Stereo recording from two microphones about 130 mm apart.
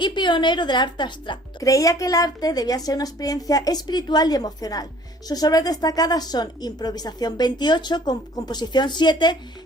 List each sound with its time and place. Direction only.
0.0 s a woman's voice: 35° left (ahead or behind)